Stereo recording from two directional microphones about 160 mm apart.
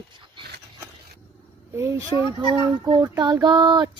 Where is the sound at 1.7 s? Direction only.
15° right (ahead or behind).